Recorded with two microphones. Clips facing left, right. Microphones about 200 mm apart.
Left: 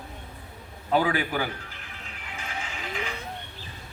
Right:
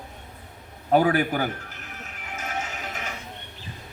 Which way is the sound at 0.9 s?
45° right (ahead or behind).